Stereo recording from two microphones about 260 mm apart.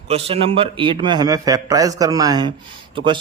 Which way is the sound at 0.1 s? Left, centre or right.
Right.